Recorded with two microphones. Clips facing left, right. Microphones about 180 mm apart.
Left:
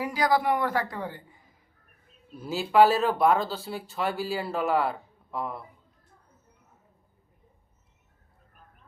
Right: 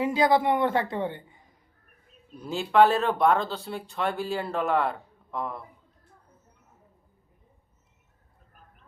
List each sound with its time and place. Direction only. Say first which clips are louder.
0.0 s a woman's voice: right 3 dB; 25° right (ahead or behind)
2.3 s speech: even; 5° left (ahead or behind)